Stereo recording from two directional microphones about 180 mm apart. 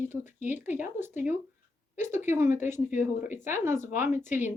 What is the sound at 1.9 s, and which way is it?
Speech, 45° left (ahead or behind).